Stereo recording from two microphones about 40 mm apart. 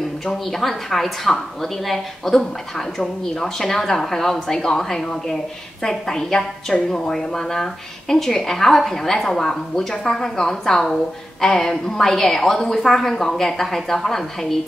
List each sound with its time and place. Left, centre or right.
0.3 s a woman's voice: centre